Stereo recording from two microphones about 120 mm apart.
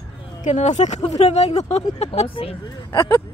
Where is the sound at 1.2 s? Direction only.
60° left (ahead or behind).